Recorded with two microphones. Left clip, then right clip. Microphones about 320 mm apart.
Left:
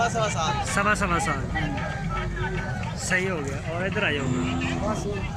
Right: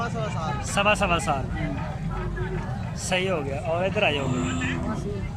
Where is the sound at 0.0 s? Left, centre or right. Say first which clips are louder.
Left 6 dB; left.